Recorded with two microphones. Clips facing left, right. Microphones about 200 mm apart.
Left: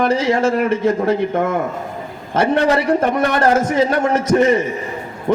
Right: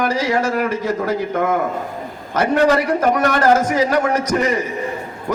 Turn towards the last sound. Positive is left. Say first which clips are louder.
# left 4 dB
turn(degrees=25)  # may be behind; listen again after turning